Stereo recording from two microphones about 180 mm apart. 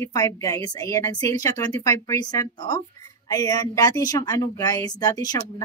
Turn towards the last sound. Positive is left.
turn(degrees=20)  # may be behind; listen again after turning